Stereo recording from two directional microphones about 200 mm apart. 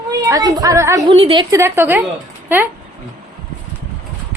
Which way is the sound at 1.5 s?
15° right (ahead or behind).